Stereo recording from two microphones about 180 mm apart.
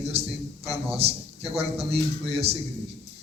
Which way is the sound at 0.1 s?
35° right (ahead or behind).